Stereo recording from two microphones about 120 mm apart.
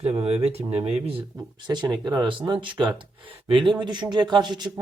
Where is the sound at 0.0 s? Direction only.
55° right (ahead or behind).